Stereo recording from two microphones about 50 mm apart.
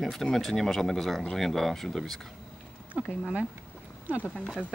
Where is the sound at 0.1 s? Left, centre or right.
Centre.